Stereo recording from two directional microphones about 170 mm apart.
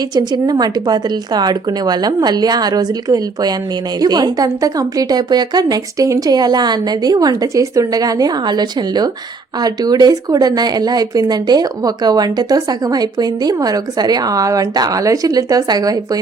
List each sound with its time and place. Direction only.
0.1 s speech: 25° right (ahead or behind)